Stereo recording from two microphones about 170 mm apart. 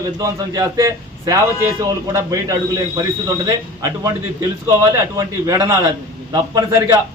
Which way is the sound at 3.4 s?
20° right (ahead or behind).